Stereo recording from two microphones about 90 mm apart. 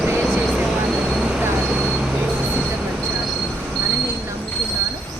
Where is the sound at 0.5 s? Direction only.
10° right (ahead or behind).